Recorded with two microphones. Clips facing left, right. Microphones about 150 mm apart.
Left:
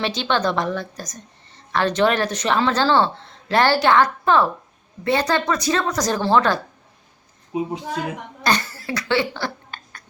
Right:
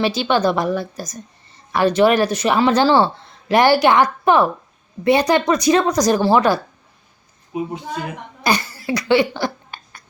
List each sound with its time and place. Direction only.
0.0 s speech: 10° right (ahead or behind)
7.5 s a woman's voice: 25° left (ahead or behind)
8.4 s a sound: 10° right (ahead or behind)